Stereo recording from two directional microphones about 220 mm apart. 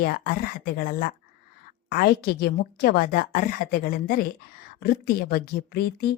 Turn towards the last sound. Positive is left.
turn(degrees=45)  # may be behind; listen again after turning